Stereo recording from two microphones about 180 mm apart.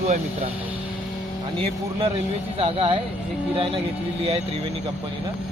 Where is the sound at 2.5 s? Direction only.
30° right (ahead or behind).